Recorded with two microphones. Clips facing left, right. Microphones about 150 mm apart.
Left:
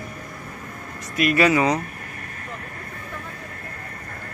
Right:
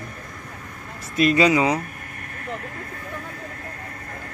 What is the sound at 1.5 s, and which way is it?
Speech, 15° right (ahead or behind).